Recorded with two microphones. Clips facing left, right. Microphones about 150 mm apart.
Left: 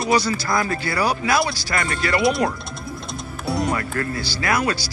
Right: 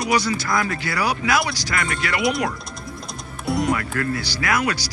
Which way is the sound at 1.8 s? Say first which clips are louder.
Left 3 dB; 30° left (ahead or behind).